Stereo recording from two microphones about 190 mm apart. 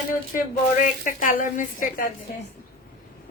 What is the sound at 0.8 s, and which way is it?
A woman's voice, 45° left (ahead or behind).